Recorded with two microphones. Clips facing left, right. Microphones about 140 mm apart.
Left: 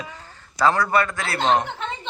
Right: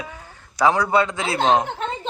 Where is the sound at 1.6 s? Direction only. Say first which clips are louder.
Right 3 dB; 40° right (ahead or behind).